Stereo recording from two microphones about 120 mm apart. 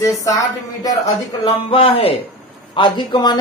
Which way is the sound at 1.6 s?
50° left (ahead or behind).